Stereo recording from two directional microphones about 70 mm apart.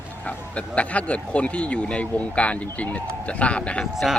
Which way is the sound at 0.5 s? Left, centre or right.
Centre.